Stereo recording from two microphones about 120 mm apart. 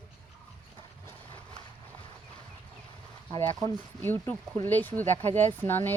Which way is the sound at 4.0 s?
15° left (ahead or behind).